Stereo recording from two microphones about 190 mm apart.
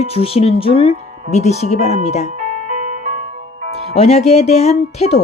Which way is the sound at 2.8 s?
40° right (ahead or behind).